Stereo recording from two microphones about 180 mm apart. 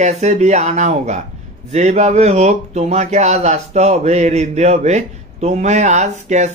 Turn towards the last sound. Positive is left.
turn(degrees=-40)  # may be behind; listen again after turning